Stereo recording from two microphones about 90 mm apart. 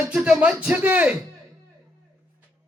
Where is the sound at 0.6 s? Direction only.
20° right (ahead or behind).